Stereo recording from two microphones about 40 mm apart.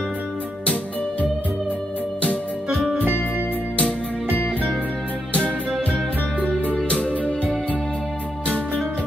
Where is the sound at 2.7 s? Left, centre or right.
Right.